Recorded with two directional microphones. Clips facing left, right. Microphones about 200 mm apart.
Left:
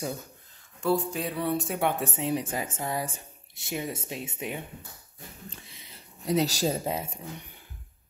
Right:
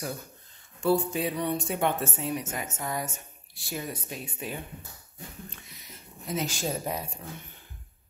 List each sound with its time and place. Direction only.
0.8 s a woman's voice: centre (ahead or behind); by 4.6 s 20° left (ahead or behind)
5.6 s a sound: 30° left (ahead or behind)
6.8 s a woman's voice: 25° left (ahead or behind)